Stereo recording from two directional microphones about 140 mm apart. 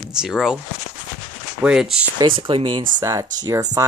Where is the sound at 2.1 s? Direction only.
35° right (ahead or behind).